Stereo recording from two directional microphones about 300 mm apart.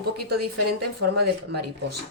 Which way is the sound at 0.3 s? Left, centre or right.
Right.